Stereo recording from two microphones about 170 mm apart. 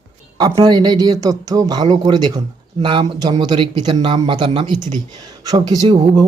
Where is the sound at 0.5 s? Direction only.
25° right (ahead or behind).